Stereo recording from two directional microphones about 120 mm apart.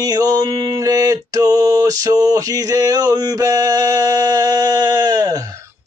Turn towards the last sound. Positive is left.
turn(degrees=-30)  # may be behind; listen again after turning